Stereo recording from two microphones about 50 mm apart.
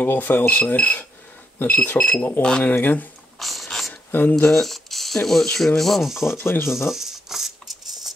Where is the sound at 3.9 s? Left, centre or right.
Left.